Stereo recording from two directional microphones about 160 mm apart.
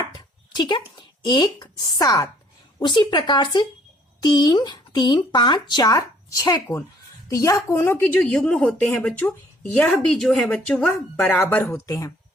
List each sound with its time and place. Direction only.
0.5 s a woman's voice: 25° left (ahead or behind)